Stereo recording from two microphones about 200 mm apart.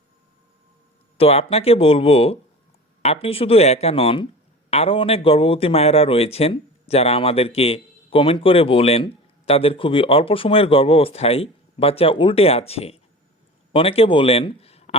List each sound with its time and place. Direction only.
1.2 s a man's voice: 30° left (ahead or behind)